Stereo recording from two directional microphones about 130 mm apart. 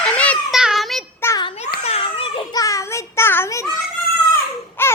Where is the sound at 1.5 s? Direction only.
55° left (ahead or behind).